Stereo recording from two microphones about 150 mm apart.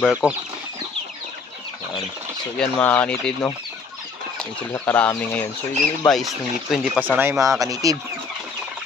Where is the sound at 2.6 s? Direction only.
10° left (ahead or behind).